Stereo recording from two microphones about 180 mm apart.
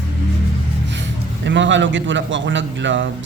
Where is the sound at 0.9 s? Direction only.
80° right.